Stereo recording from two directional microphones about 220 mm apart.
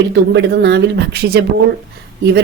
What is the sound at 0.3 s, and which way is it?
Speech, 50° right (ahead or behind).